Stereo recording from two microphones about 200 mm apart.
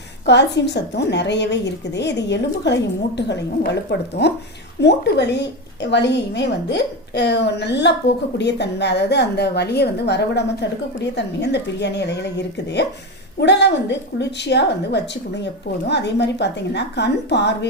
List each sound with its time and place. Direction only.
0.3 s a woman's voice: 60° left (ahead or behind)